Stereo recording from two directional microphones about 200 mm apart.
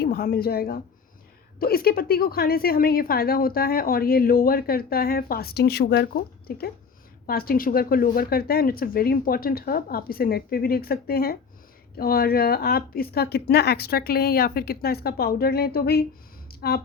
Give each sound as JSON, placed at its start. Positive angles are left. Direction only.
{"t": 0.0, "sound": "a woman's voice", "side_deg": 50}